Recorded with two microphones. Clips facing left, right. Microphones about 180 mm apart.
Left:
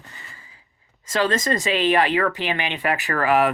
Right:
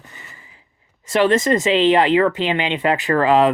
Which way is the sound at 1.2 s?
20° right (ahead or behind).